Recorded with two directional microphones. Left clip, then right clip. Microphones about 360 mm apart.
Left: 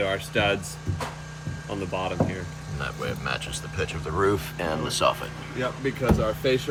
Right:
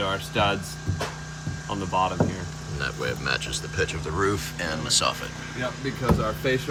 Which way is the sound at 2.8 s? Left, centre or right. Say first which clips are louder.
Right 2 dB; centre.